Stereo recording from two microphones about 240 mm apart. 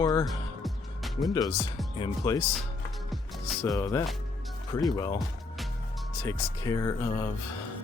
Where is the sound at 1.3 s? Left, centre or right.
Centre.